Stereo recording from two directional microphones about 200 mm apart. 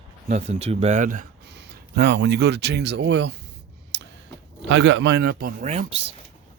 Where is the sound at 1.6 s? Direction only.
55° right (ahead or behind).